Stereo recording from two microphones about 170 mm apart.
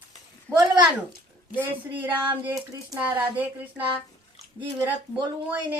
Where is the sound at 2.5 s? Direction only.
20° right (ahead or behind).